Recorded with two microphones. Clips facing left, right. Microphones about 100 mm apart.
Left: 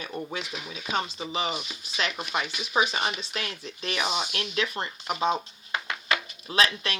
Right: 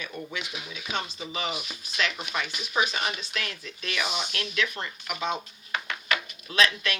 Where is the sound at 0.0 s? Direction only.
35° left (ahead or behind).